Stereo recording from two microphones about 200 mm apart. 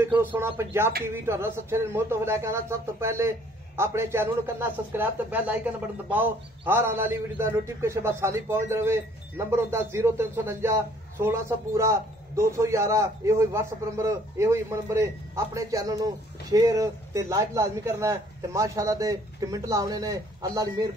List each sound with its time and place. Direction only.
0.2 s a man's voice: 10° right (ahead or behind)